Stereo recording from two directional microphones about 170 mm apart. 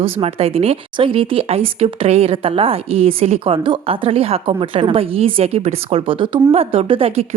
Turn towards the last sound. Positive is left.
turn(degrees=-35)  # may be behind; listen again after turning